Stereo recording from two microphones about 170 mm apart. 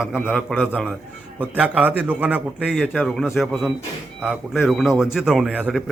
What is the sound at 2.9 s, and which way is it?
A man's voice, centre (ahead or behind).